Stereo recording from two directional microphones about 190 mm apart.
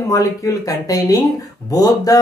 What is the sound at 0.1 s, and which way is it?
Speech, 15° left (ahead or behind).